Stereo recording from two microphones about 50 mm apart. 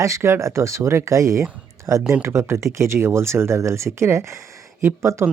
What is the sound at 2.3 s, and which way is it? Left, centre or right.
Speech, right.